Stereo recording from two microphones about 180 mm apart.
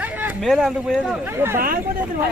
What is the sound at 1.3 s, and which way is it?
Speech, 15° right (ahead or behind).